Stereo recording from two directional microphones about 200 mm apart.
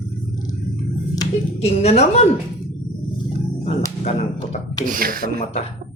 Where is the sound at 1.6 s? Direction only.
30° left (ahead or behind).